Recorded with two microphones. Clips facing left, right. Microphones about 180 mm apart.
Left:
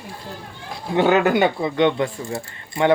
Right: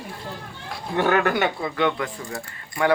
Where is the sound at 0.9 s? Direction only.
20° left (ahead or behind).